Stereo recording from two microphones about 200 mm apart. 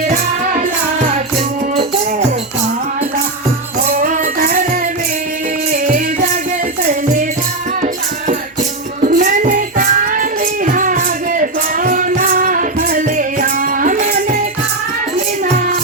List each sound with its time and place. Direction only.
3.8 s music: 40° right (ahead or behind)
5.7 s music: 40° right (ahead or behind)
9.0 s child singing: 40° right (ahead or behind)
10.7 s music: 40° right (ahead or behind)